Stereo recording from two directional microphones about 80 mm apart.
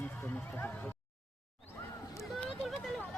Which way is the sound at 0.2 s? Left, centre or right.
Left.